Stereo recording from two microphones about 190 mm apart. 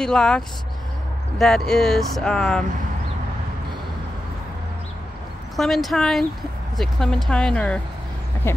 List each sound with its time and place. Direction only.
0.0 s speech: 5° left (ahead or behind)
1.4 s speech: centre (ahead or behind)
5.6 s speech: centre (ahead or behind)